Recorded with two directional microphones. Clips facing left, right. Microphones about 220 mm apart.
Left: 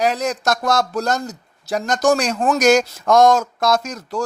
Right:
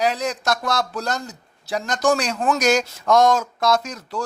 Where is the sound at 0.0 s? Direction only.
45° left (ahead or behind).